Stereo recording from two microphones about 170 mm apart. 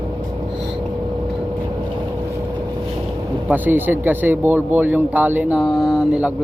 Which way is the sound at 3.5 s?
10° right (ahead or behind).